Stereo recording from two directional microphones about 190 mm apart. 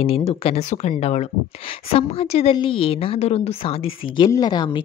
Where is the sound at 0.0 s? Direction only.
30° left (ahead or behind).